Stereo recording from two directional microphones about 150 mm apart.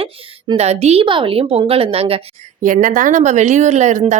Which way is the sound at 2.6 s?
60° right (ahead or behind).